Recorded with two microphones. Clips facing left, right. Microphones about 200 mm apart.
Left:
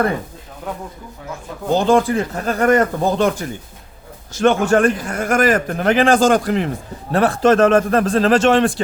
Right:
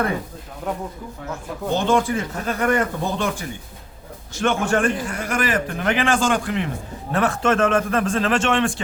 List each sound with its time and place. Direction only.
1.7 s a man's voice: 35° left (ahead or behind)